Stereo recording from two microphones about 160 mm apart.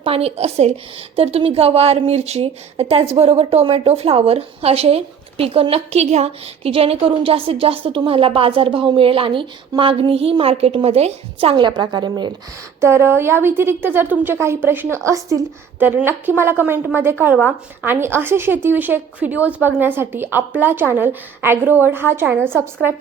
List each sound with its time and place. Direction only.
0.0 s a woman's voice: 40° right (ahead or behind)
12.8 s a woman's voice: 15° right (ahead or behind)